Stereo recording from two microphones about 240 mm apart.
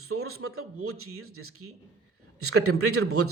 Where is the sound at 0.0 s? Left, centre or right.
Right.